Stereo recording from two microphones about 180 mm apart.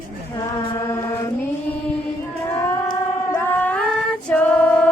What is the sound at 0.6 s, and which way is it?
Chant, 30° left (ahead or behind).